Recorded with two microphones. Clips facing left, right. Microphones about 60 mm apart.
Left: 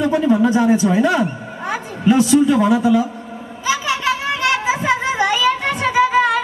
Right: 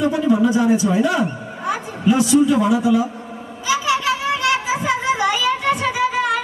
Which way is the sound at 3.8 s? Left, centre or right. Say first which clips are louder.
Even; left.